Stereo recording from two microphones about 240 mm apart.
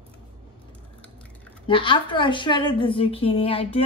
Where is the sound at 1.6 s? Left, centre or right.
Centre.